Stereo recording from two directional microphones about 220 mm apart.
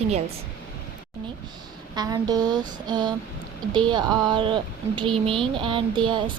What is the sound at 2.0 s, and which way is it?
A woman's voice, 15° right (ahead or behind).